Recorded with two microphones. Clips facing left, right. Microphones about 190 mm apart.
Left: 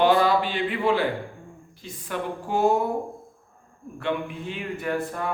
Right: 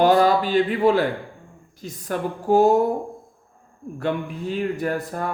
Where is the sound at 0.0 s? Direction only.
40° right (ahead or behind).